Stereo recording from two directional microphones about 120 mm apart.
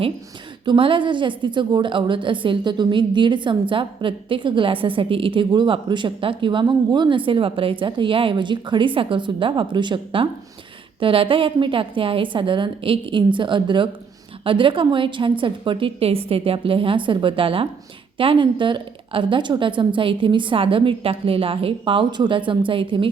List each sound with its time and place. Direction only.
0.6 s a woman's voice: 45° right (ahead or behind)